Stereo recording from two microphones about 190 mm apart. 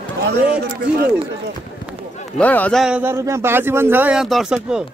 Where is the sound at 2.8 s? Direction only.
10° right (ahead or behind).